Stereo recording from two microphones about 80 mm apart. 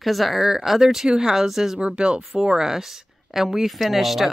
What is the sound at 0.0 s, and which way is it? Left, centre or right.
Speech, centre.